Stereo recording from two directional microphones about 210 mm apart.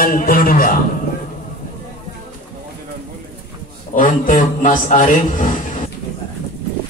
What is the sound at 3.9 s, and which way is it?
A man's voice, 40° left (ahead or behind).